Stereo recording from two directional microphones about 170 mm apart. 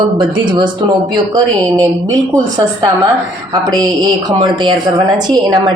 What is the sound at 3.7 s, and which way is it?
A woman's voice, 25° right (ahead or behind).